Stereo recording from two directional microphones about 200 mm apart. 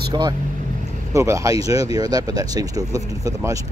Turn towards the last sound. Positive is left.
turn(degrees=-15)  # may be behind; listen again after turning